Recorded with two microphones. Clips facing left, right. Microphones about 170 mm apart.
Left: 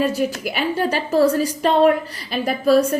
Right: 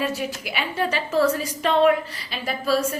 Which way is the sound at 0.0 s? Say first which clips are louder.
Left 6 dB; 40° left (ahead or behind).